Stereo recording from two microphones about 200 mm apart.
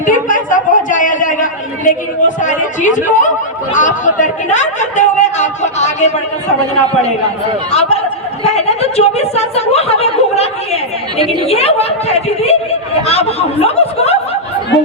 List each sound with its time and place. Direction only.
0.0 s a man's voice: 40° left (ahead or behind)
7.7 s speech: 30° left (ahead or behind)